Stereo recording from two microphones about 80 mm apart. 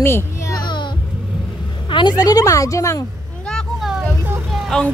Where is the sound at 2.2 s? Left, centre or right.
Left.